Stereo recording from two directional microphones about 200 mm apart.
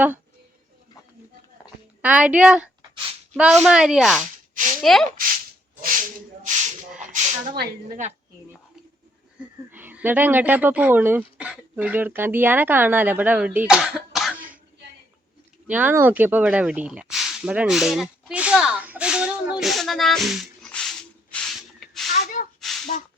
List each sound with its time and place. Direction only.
2.0 s speech: 5° right (ahead or behind)
5.8 s rub: 40° right (ahead or behind)
7.1 s speech: 45° right (ahead or behind)
9.7 s speech: 10° right (ahead or behind)
15.6 s speech: 10° right (ahead or behind)
22.2 s gasp: 40° left (ahead or behind)
22.9 s speech: 40° left (ahead or behind)